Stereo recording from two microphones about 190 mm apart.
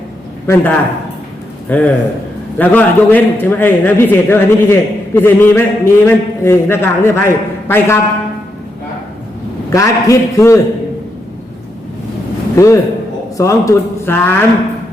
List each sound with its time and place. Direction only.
0.4 s a man's voice: 10° left (ahead or behind)
9.6 s a man's voice: 15° left (ahead or behind)
12.5 s a man's voice: 15° left (ahead or behind)